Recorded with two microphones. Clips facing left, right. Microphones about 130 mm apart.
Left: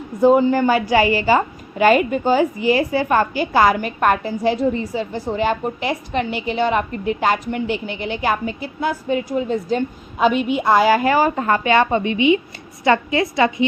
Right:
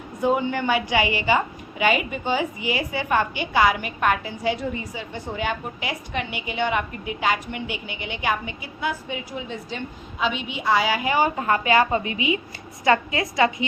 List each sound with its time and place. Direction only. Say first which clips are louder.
0.2 s a woman's voice: left 9 dB; 35° left (ahead or behind)